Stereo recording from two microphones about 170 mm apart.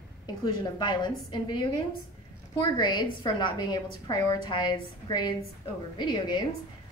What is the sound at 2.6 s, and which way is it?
A woman's voice, 25° left (ahead or behind).